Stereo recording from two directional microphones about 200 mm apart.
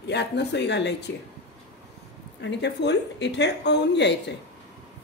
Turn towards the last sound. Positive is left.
turn(degrees=60)  # may be behind; listen again after turning